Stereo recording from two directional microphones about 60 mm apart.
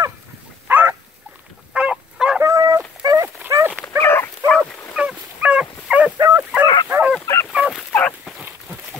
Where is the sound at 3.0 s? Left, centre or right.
Right.